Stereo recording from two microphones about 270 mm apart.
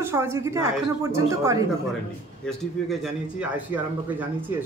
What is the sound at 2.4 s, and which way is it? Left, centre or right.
A man's voice, centre.